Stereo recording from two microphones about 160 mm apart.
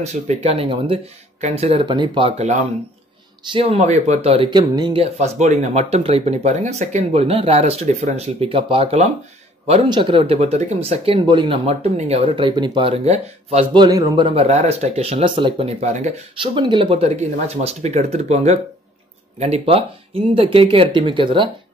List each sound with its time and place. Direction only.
0.0 s speech: 40° right (ahead or behind)
2.3 s speech: 45° right (ahead or behind)
3.4 s speech: 35° right (ahead or behind)
8.5 s speech: 35° right (ahead or behind)
9.8 s speech: 30° right (ahead or behind)
13.7 s a man's voice: 25° right (ahead or behind)
14.4 s speech: 40° right (ahead or behind)
15.8 s speech: 45° right (ahead or behind)
16.3 s speech: 30° right (ahead or behind)